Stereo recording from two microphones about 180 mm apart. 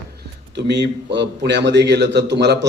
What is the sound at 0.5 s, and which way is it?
A man's voice, 75° right (ahead or behind).